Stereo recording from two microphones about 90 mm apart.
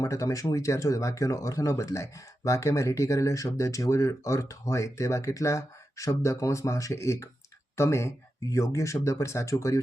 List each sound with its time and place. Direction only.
0.0 s speech: 40° left (ahead or behind)